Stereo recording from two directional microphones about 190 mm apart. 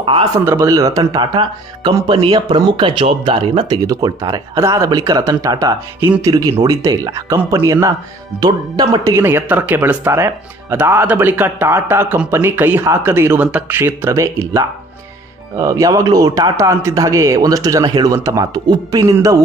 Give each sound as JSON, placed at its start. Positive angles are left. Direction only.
{"t": 0.0, "sound": "speech", "side_deg": -30}
{"t": 0.5, "sound": "speech", "side_deg": -15}